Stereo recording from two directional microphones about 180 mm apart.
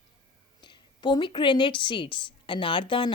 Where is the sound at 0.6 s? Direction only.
25° left (ahead or behind).